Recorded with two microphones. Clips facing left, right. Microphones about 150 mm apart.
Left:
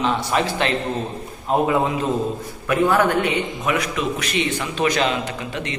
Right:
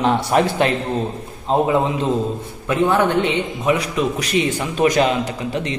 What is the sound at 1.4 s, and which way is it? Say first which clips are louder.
A man's voice: right 2 dB; 25° right (ahead or behind).